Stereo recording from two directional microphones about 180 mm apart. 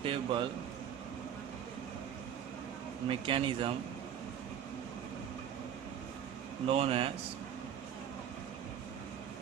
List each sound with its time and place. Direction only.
0.0 s a man's voice: 30° right (ahead or behind)
3.1 s speech: 30° right (ahead or behind)
6.7 s speech: 30° right (ahead or behind)